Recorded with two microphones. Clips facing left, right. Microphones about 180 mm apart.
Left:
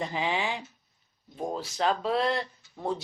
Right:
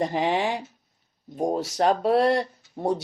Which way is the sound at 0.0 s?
50° right (ahead or behind).